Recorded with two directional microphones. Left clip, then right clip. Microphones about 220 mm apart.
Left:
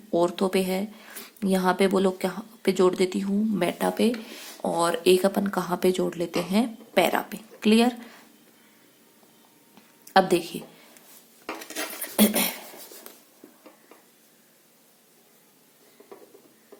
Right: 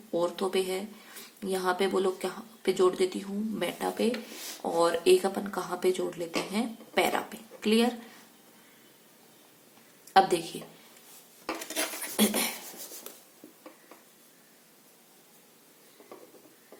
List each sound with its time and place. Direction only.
0.1 s speech: 45° left (ahead or behind)
10.1 s a woman's voice: 45° left (ahead or behind)
12.1 s a sound: 50° left (ahead or behind)